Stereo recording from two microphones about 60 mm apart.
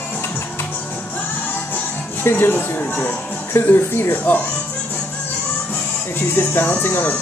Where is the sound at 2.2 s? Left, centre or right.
Left.